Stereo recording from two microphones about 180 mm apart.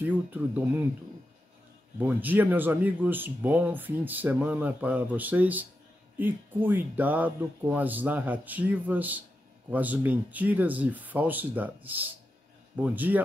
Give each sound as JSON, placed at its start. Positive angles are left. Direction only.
{"t": 0.0, "sound": "speech", "side_deg": -10}
{"t": 2.0, "sound": "speech", "side_deg": -10}